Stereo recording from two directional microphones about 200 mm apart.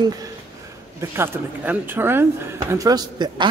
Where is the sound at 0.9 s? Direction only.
10° right (ahead or behind).